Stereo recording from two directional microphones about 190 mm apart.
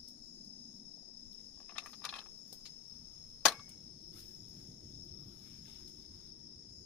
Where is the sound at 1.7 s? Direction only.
5° left (ahead or behind).